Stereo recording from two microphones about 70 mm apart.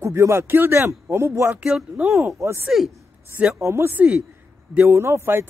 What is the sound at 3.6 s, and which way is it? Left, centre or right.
Speech, right.